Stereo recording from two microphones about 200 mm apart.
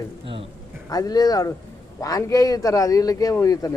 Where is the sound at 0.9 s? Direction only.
20° left (ahead or behind).